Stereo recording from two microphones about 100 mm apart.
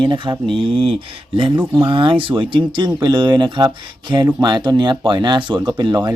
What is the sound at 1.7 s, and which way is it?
Speech, 55° right (ahead or behind).